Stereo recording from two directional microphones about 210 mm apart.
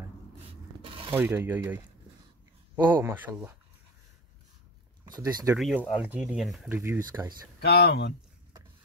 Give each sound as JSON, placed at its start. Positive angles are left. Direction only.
{"t": 0.8, "sound": "a sound", "side_deg": -25}
{"t": 1.1, "sound": "speech", "side_deg": -10}
{"t": 5.0, "sound": "speech", "side_deg": -20}
{"t": 5.6, "sound": "speech", "side_deg": 0}
{"t": 7.1, "sound": "speech", "side_deg": -20}
{"t": 7.6, "sound": "speech", "side_deg": 50}